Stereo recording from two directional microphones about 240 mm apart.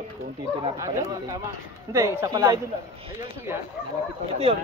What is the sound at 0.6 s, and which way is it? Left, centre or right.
A man's voice, centre.